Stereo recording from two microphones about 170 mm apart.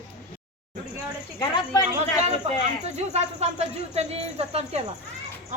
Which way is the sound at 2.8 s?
40° right (ahead or behind).